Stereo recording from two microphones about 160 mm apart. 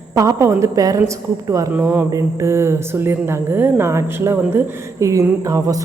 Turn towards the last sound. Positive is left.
turn(degrees=-20)  # may be behind; listen again after turning